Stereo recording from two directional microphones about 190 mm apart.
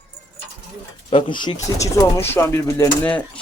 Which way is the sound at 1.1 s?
30° left (ahead or behind).